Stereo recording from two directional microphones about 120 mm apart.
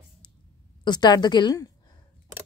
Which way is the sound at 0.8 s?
35° left (ahead or behind).